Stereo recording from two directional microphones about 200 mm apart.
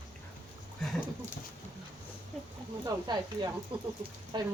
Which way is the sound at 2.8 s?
20° right (ahead or behind).